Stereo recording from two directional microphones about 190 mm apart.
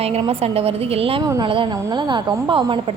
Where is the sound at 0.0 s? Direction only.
30° right (ahead or behind).